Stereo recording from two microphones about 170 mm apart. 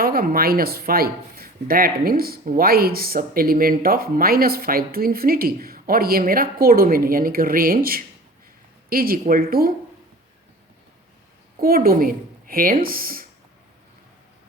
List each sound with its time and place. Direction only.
0.0 s speech: 60° right (ahead or behind)
11.6 s speech: 60° right (ahead or behind)